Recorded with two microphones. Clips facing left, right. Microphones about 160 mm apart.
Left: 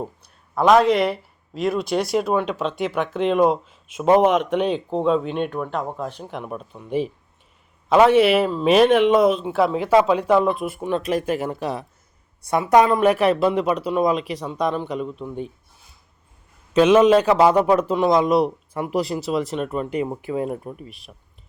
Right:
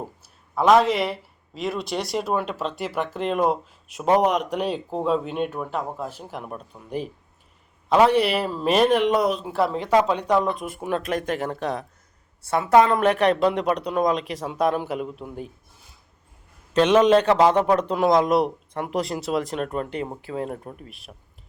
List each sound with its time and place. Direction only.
0.5 s speech: centre (ahead or behind)
12.4 s a woman's voice: 15° left (ahead or behind); by 15.4 s 5° right (ahead or behind)
16.7 s speech: 5° left (ahead or behind)